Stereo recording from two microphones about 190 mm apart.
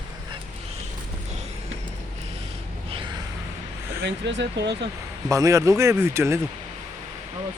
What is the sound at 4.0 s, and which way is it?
Speech, 65° right (ahead or behind).